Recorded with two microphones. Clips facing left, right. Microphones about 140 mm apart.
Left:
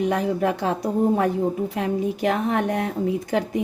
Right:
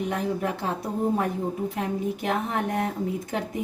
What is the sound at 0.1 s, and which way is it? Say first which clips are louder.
Speech: left 5 dB; 90° left.